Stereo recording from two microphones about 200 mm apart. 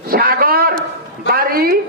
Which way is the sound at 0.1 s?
45° right (ahead or behind).